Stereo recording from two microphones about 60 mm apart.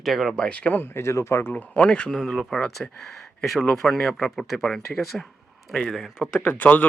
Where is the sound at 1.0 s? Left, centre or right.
Left.